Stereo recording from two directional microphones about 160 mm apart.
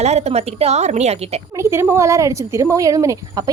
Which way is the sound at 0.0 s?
40° right (ahead or behind).